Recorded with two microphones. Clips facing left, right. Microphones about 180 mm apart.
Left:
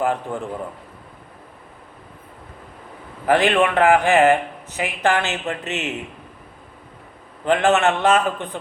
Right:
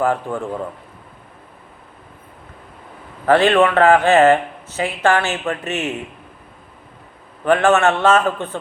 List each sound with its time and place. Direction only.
0.0 s a man's voice: 20° left (ahead or behind)
3.2 s a man's voice: 15° left (ahead or behind)
7.4 s a man's voice: 20° left (ahead or behind)